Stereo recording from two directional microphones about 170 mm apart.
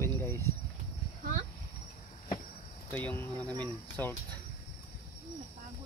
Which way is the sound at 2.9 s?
10° left (ahead or behind).